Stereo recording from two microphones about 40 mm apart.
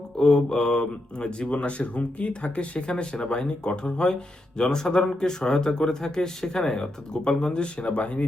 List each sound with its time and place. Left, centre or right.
0.2 s speech: centre; by 8.2 s left